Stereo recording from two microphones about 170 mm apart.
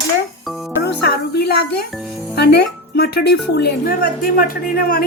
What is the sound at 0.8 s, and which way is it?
A woman's voice, 70° left (ahead or behind).